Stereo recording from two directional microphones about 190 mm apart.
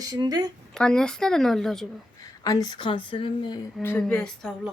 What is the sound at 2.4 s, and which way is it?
Speech, 20° left (ahead or behind).